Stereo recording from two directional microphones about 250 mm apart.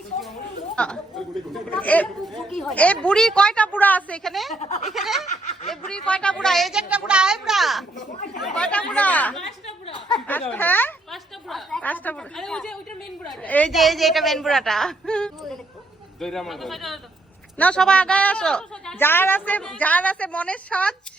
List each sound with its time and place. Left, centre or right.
0.8 s a woman's voice: centre
4.5 s speech: left
4.9 s a woman's voice: centre
9.6 s a sound: left
10.2 s a woman's voice: centre